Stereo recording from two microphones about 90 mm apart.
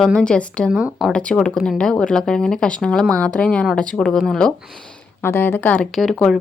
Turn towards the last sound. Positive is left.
turn(degrees=5)  # may be behind; listen again after turning